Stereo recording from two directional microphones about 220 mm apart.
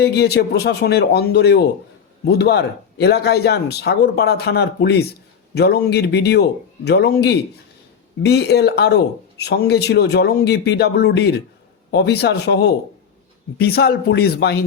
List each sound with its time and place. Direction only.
0.0 s speech: 45° left (ahead or behind)